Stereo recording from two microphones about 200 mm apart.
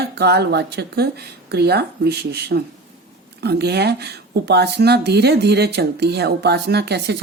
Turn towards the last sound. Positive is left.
turn(degrees=-55)  # may be behind; listen again after turning